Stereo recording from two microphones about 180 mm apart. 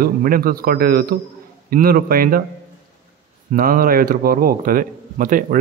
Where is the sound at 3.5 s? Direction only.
50° right (ahead or behind).